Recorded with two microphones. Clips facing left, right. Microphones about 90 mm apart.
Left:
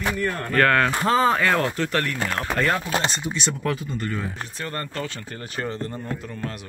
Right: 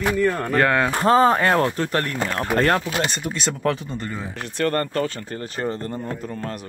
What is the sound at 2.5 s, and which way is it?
Speech, 50° right (ahead or behind).